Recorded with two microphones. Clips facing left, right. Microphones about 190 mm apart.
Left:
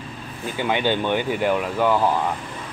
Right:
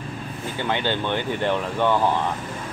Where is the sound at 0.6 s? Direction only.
15° left (ahead or behind).